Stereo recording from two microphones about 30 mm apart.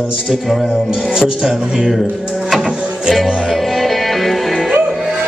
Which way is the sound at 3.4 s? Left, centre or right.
Centre.